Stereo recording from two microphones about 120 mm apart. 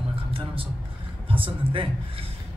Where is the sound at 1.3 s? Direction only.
45° right (ahead or behind).